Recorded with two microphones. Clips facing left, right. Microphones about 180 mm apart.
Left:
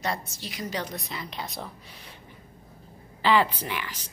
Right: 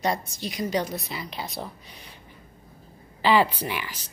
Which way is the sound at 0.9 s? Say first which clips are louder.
Right 2 dB; 5° right (ahead or behind).